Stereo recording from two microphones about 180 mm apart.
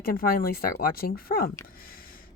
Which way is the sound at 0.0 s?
55° left (ahead or behind).